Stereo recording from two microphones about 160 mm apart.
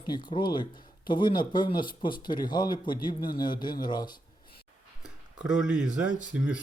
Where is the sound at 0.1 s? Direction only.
30° left (ahead or behind).